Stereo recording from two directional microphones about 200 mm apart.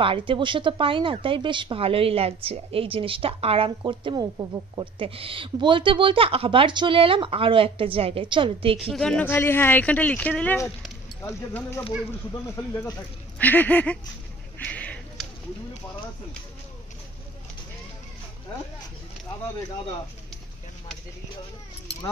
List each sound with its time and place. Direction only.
0.0 s speech: 25° right (ahead or behind)
8.9 s speech: 5° left (ahead or behind)
13.4 s speech: 10° left (ahead or behind)
14.6 s a sound: 5° left (ahead or behind)